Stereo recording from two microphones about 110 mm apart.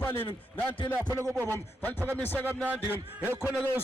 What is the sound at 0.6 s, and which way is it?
Speech, 50° left (ahead or behind).